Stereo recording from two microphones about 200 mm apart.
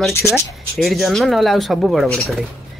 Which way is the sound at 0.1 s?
15° left (ahead or behind).